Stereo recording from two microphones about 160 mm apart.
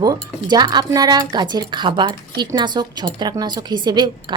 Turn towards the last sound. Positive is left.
turn(degrees=-25)  # may be behind; listen again after turning